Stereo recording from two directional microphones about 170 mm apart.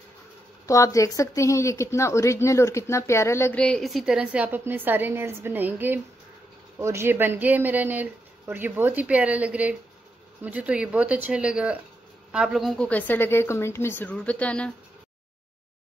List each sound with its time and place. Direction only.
0.7 s a woman's voice: 20° left (ahead or behind)